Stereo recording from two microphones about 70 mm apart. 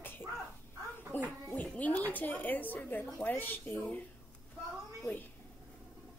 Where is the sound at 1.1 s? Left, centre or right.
Left.